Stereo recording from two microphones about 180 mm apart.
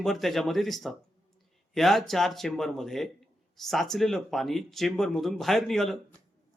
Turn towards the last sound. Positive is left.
turn(degrees=0)  # may be behind; listen again after turning